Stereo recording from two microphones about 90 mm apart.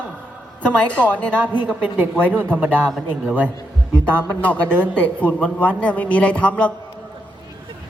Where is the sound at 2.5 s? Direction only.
20° right (ahead or behind).